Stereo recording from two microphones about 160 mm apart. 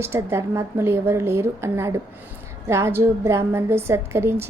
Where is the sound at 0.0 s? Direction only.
15° right (ahead or behind).